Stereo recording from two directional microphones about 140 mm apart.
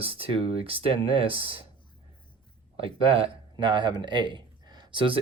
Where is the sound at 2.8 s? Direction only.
40° right (ahead or behind).